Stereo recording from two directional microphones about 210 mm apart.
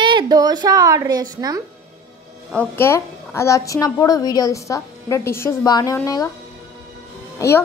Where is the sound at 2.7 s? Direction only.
10° left (ahead or behind).